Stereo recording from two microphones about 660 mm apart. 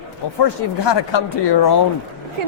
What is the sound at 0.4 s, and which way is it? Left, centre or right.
Speech, left.